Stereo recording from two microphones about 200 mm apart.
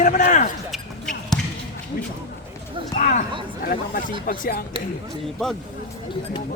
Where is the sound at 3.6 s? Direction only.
45° left (ahead or behind).